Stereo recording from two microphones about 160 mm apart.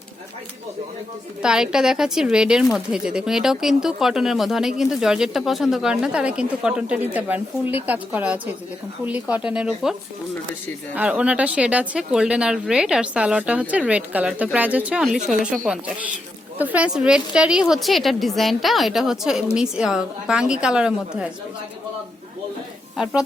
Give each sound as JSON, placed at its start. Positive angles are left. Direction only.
{"t": 1.4, "sound": "speech", "side_deg": -5}
{"t": 10.9, "sound": "speech", "side_deg": -10}